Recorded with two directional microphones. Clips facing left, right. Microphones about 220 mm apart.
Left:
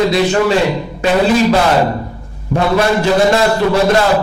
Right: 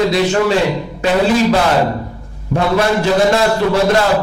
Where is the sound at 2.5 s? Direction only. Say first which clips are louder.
Left 1 dB; 35° left (ahead or behind).